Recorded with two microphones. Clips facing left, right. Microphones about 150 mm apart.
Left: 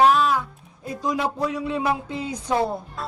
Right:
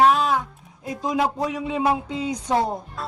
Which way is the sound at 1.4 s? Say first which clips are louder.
Right 1 dB; 20° right (ahead or behind).